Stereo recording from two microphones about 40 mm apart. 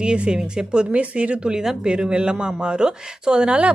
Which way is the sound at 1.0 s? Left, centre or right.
Right.